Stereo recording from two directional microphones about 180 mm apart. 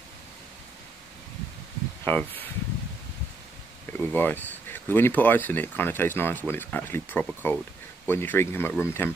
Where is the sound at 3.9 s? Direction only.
10° left (ahead or behind).